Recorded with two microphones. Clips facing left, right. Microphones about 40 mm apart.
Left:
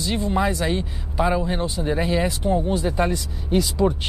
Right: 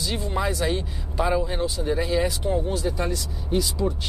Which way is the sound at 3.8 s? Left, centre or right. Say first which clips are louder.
Left 6 dB; left.